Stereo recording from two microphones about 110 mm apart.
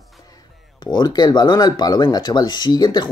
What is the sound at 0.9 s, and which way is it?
Speech, 35° left (ahead or behind).